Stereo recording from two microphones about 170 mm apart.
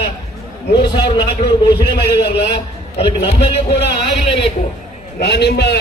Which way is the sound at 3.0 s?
35° left (ahead or behind).